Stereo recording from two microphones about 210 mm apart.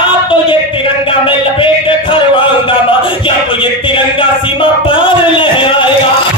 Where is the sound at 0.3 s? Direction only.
25° left (ahead or behind).